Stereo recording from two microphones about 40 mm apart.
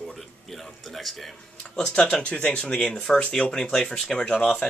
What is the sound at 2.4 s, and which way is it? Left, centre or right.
Speech, left.